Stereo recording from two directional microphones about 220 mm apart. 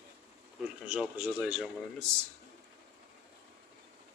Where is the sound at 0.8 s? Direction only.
5° right (ahead or behind).